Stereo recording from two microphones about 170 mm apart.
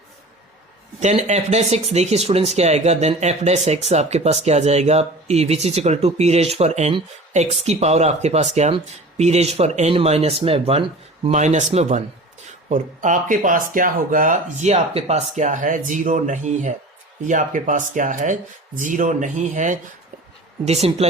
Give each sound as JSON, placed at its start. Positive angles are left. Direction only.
{"t": 0.9, "sound": "speech", "side_deg": -40}